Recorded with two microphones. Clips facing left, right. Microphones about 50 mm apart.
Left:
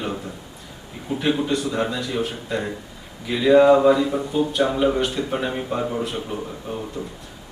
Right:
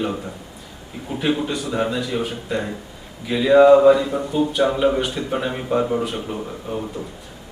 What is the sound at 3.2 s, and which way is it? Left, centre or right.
Speech, centre.